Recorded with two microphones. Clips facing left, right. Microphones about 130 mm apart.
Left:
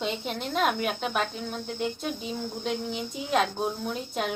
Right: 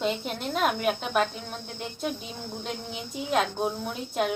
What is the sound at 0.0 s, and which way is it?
Speech, centre (ahead or behind).